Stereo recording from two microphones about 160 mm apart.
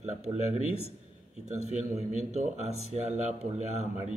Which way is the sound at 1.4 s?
45° right (ahead or behind).